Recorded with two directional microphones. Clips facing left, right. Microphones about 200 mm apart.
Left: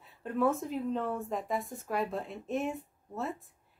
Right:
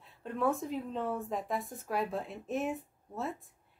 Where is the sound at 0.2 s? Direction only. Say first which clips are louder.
Left 2 dB; centre (ahead or behind).